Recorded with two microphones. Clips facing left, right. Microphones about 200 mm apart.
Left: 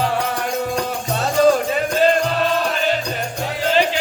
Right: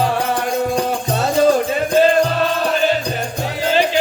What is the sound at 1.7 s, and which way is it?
Music, 40° right (ahead or behind).